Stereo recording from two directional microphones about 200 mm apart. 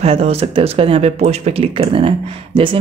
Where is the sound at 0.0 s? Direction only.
30° right (ahead or behind).